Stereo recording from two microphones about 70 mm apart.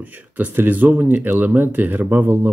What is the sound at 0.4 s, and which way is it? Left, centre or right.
Speech, right.